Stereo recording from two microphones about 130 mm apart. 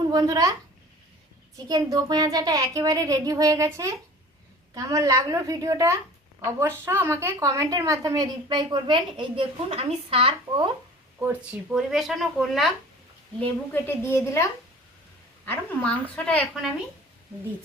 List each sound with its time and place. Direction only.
0.1 s speech: 30° right (ahead or behind)
1.5 s a woman's voice: 30° right (ahead or behind)
11.7 s speech: centre (ahead or behind)
13.7 s a woman's voice: 20° left (ahead or behind)
15.4 s speech: 10° left (ahead or behind)